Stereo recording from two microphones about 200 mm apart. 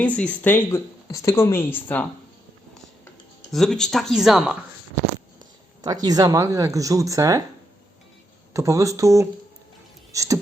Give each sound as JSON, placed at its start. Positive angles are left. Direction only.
{"t": 0.0, "sound": "speech", "side_deg": 5}
{"t": 3.5, "sound": "speech", "side_deg": 0}
{"t": 5.8, "sound": "speech", "side_deg": -20}
{"t": 8.5, "sound": "speech", "side_deg": -15}
{"t": 10.1, "sound": "a sound", "side_deg": -15}